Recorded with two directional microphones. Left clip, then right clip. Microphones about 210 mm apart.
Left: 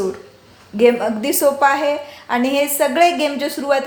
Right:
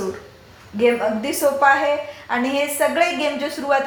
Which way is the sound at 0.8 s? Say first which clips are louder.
Left 3 dB; 50° left (ahead or behind).